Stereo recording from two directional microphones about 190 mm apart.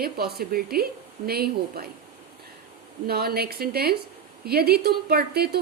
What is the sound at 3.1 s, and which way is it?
A woman's voice, 55° right (ahead or behind).